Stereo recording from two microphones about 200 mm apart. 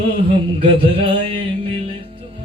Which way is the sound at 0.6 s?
25° right (ahead or behind).